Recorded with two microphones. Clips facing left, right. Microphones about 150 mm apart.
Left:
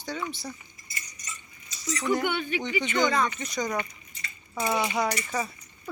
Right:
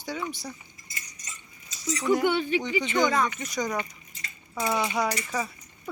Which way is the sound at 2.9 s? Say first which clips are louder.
Right 1 dB; 10° right (ahead or behind).